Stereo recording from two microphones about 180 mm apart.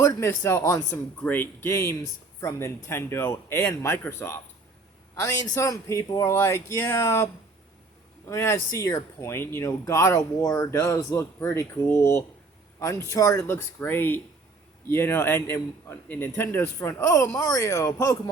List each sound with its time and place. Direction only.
0.0 s speech: 15° left (ahead or behind)
8.3 s speech: 15° left (ahead or behind)